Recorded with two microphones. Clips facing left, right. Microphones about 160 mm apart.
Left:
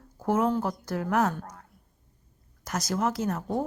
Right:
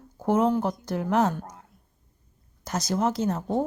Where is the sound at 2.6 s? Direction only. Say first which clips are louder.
Right 2 dB; 25° right (ahead or behind).